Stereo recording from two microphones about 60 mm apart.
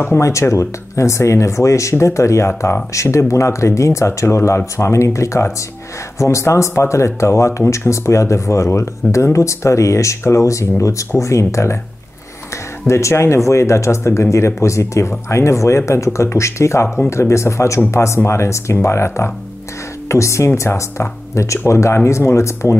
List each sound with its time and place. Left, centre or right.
0.2 s speech: left
12.8 s speech: left